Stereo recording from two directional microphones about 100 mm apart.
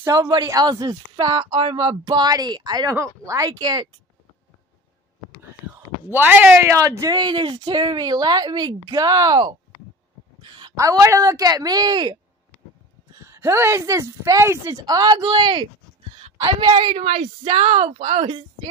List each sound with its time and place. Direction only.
0.2 s a woman's voice: 50° right (ahead or behind)
6.0 s speech: 20° right (ahead or behind)
6.6 s speech: 30° right (ahead or behind)
7.2 s a woman's voice: 50° right (ahead or behind)
10.4 s a sound: 50° right (ahead or behind)
10.8 s speech: 30° right (ahead or behind); by 12.2 s 50° right (ahead or behind)
13.2 s speech: 30° right (ahead or behind)
14.9 s a woman's voice: 40° right (ahead or behind)
16.9 s a woman's voice: 90° right